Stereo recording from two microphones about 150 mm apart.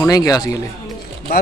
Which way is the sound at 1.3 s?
90° left.